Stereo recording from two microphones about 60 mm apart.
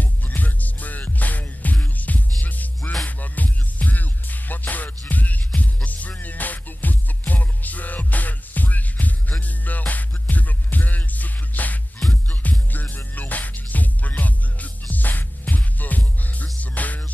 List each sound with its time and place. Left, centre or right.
0.0 s music: left